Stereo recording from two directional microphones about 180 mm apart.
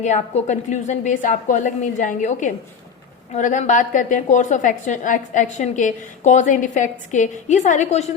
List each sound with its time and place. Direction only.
0.0 s a woman's voice: 40° left (ahead or behind)